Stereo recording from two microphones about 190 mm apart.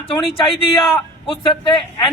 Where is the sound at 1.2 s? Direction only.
30° left (ahead or behind).